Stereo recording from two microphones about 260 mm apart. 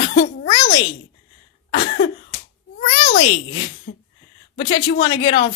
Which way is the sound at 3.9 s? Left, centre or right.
Left.